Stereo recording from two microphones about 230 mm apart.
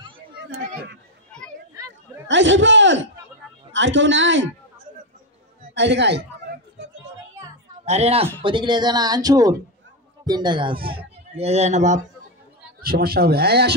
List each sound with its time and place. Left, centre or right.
1.3 s children playing: centre
2.2 s a man's voice: right
5.8 s a sound: right
7.8 s a man's voice: right
12.8 s speech: right